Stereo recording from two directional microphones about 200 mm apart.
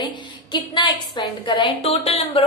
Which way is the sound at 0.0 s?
20° left (ahead or behind).